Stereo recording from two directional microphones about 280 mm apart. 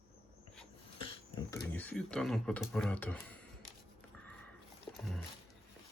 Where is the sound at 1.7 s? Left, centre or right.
Centre.